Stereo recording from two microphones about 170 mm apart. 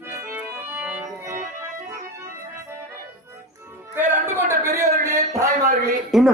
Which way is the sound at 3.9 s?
15° right (ahead or behind).